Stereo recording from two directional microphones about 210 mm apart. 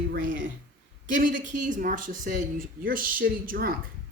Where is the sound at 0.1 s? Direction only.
40° right (ahead or behind).